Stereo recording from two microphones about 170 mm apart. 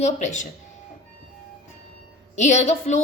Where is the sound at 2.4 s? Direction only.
40° left (ahead or behind).